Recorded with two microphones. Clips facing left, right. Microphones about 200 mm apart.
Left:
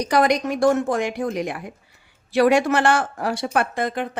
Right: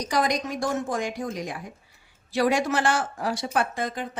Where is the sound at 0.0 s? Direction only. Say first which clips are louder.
Left 6 dB; 65° left (ahead or behind).